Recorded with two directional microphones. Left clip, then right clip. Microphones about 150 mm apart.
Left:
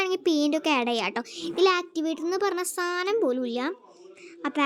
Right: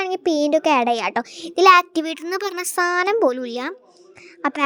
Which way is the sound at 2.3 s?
55° right (ahead or behind).